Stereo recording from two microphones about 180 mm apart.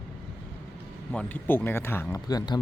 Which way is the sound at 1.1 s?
10° left (ahead or behind).